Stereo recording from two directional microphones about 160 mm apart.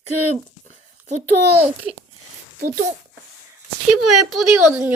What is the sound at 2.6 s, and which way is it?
Speech, 60° right (ahead or behind).